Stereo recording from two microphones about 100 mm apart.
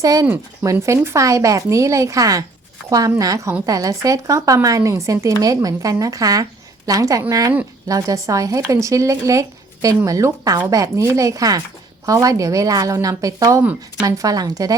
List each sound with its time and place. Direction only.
0.0 s speech: 35° right (ahead or behind)